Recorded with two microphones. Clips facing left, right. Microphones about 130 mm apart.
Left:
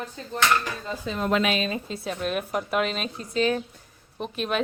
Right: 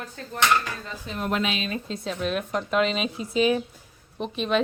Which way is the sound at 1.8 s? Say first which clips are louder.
Right 1 dB; 5° left (ahead or behind).